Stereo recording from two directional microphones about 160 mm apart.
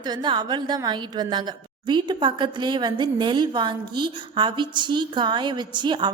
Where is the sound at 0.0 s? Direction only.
25° right (ahead or behind).